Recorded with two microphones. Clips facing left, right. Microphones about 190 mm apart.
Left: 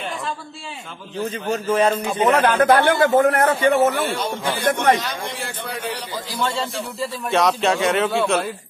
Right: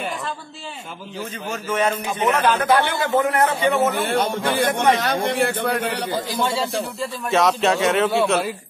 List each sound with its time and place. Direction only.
1.5 s speech: 35° left (ahead or behind)
2.4 s a man's voice: 55° left (ahead or behind)
4.1 s a man's voice: 55° right (ahead or behind)
6.4 s a man's voice: 10° right (ahead or behind)